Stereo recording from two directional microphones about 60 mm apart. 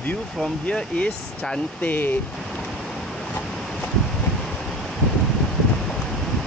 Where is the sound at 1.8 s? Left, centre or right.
Left.